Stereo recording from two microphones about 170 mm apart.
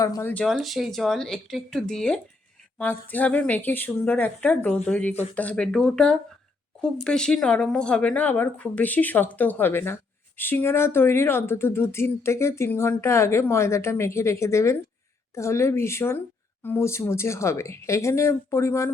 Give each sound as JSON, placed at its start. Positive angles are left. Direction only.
{"t": 0.0, "sound": "speech", "side_deg": 15}
{"t": 0.4, "sound": "speech", "side_deg": 0}